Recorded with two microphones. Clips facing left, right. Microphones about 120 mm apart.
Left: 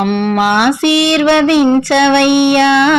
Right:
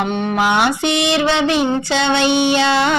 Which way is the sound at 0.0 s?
65° left (ahead or behind).